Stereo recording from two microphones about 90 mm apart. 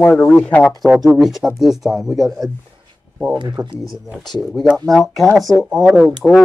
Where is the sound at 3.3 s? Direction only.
50° right (ahead or behind).